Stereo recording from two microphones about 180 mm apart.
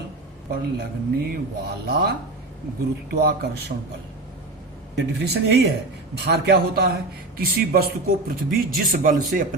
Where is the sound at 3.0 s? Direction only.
60° right (ahead or behind).